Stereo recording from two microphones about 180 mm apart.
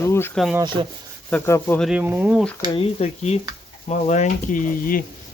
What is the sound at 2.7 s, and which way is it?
Speech, 35° left (ahead or behind).